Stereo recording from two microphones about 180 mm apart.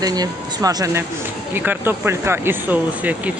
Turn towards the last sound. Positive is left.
turn(degrees=-10)  # may be behind; listen again after turning